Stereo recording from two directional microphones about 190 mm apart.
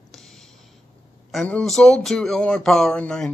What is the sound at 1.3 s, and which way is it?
Speech, 5° left (ahead or behind).